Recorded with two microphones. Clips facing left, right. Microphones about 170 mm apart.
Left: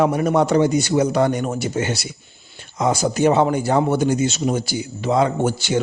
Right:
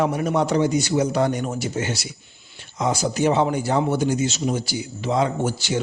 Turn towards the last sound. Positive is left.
turn(degrees=60)  # may be behind; listen again after turning